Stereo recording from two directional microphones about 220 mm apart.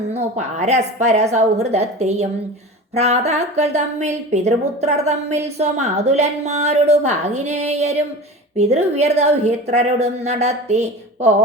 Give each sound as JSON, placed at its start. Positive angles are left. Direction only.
{"t": 0.1, "sound": "a woman's voice", "side_deg": -30}